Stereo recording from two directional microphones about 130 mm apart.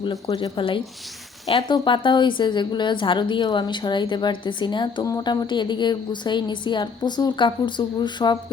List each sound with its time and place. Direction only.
0.0 s speech: 35° left (ahead or behind)
0.5 s a woman's voice: 40° left (ahead or behind)